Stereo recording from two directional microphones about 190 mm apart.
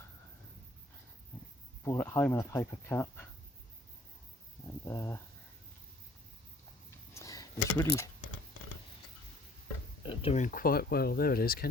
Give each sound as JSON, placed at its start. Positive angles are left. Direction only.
{"t": 1.3, "sound": "cricket", "side_deg": 10}
{"t": 1.8, "sound": "speech", "side_deg": 15}
{"t": 4.9, "sound": "speech", "side_deg": 15}
{"t": 7.1, "sound": "a sound", "side_deg": 15}
{"t": 10.0, "sound": "speech", "side_deg": 30}